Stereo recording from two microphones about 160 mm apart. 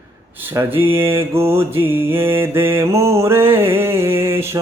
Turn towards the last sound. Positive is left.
turn(degrees=-15)  # may be behind; listen again after turning